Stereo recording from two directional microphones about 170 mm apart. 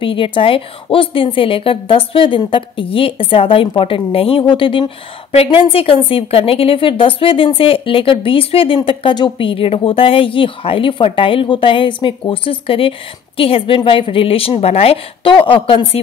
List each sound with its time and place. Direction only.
0.0 s a woman's voice: 30° left (ahead or behind)